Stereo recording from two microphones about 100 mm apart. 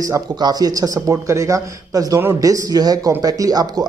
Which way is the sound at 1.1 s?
30° right (ahead or behind).